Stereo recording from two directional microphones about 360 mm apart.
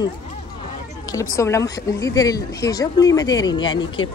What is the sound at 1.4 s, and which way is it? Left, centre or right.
Speech, centre.